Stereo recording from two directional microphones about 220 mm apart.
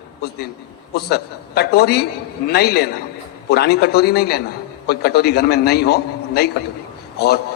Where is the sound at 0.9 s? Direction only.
45° left (ahead or behind).